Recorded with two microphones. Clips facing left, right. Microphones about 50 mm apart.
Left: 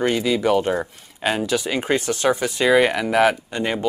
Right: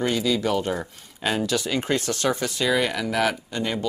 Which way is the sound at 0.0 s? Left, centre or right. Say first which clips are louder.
Left 4 dB; left.